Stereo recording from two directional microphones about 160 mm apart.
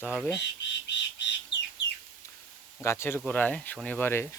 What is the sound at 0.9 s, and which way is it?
Bird, 90° left.